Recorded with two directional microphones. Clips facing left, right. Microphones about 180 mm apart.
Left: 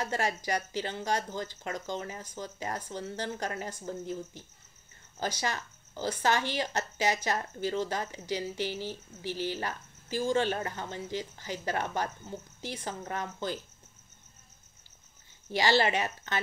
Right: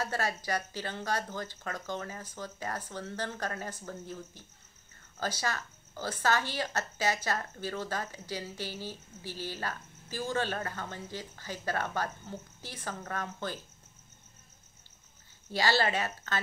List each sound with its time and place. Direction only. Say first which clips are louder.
0.0 s speech: left 2 dB; 15° left (ahead or behind)
15.5 s speech: left 2 dB; 15° left (ahead or behind)